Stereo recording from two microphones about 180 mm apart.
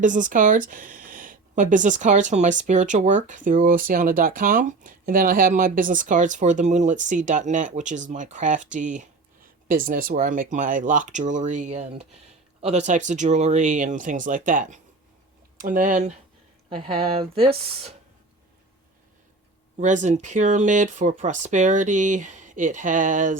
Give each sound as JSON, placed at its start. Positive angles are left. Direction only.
{"t": 0.0, "sound": "speech", "side_deg": -45}
{"t": 16.6, "sound": "speech", "side_deg": -30}
{"t": 19.8, "sound": "speech", "side_deg": -40}